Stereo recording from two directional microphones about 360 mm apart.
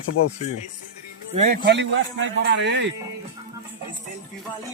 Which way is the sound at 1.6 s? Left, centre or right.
Right.